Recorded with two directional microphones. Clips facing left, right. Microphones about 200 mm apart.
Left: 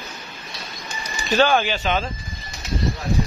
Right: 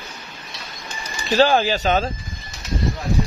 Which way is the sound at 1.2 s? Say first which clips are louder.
Right 2 dB; 30° right (ahead or behind).